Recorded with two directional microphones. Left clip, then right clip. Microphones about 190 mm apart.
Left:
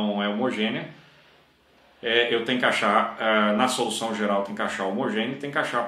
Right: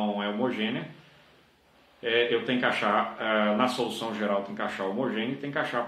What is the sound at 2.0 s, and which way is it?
Speech, 10° left (ahead or behind).